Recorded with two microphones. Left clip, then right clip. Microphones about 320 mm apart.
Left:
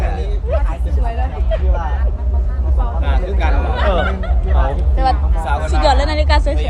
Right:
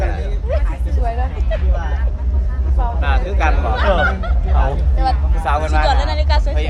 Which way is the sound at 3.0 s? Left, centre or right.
Centre.